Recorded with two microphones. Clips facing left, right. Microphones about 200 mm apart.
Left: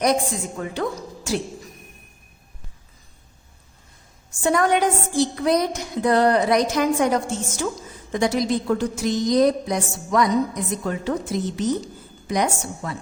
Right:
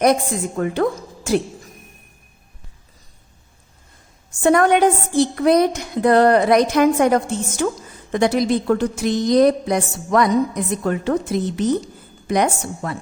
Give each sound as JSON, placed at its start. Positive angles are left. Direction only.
{"t": 0.6, "sound": "a woman's voice", "side_deg": -55}
{"t": 4.4, "sound": "a woman's voice", "side_deg": -60}